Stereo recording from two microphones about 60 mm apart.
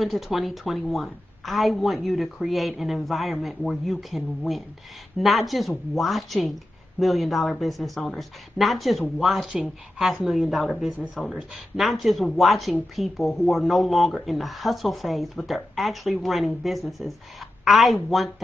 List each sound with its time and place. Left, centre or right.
0.0 s speech: centre
5.2 s a woman's voice: centre